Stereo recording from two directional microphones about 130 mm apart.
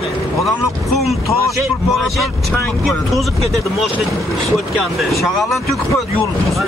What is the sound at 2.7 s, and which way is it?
Speech, centre (ahead or behind).